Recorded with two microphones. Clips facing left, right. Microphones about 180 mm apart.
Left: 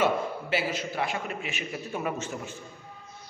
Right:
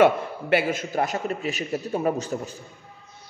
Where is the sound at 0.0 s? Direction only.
60° right (ahead or behind); by 2.5 s 35° right (ahead or behind).